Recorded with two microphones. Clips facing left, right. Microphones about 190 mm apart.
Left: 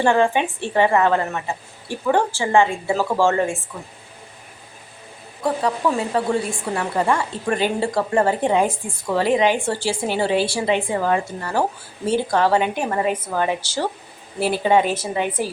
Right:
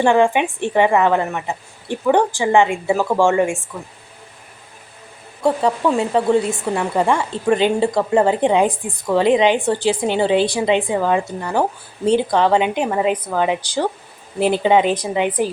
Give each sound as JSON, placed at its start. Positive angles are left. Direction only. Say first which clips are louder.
{"t": 0.0, "sound": "a woman's voice", "louder": "right 3 dB", "side_deg": -15}
{"t": 5.4, "sound": "a woman's voice", "louder": "right 4 dB", "side_deg": -25}